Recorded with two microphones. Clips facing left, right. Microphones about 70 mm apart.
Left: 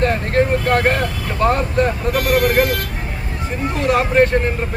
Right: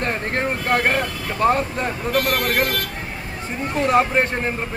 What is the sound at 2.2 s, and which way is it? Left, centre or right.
Speech, centre.